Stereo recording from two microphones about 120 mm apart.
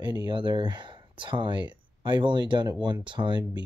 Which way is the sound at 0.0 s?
40° right (ahead or behind).